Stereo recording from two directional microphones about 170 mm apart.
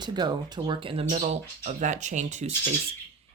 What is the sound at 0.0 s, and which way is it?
Speech, 25° right (ahead or behind).